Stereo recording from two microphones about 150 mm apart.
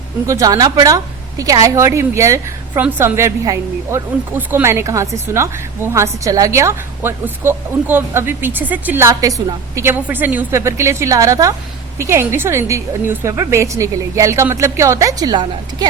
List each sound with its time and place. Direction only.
0.3 s a woman's voice: 20° right (ahead or behind)